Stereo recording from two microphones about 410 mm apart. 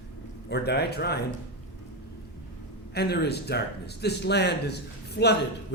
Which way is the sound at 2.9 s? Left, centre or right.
Left.